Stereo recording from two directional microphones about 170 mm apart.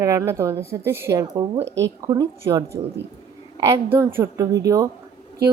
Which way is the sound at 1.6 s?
90° right.